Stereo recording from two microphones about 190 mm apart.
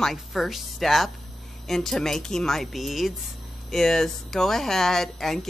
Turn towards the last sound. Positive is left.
turn(degrees=0)  # may be behind; listen again after turning